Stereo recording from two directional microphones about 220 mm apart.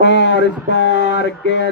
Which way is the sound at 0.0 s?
55° left (ahead or behind).